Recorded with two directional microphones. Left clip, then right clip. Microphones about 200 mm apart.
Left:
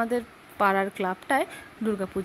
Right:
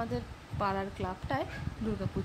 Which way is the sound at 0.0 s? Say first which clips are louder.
Left 9 dB; 25° left (ahead or behind).